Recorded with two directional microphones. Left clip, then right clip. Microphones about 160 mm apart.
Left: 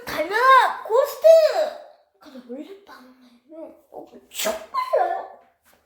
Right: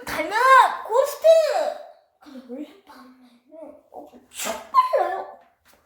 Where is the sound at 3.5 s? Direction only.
25° left (ahead or behind).